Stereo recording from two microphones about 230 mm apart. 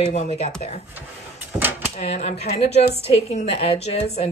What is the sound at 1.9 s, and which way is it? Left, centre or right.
A woman's voice, left.